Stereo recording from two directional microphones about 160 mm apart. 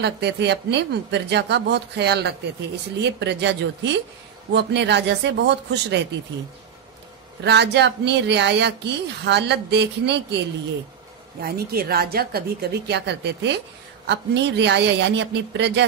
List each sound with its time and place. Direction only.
0.0 s speech: 90° right
7.4 s speech: 90° right
11.4 s a woman's voice: 70° right (ahead or behind); by 15.8 s 90° right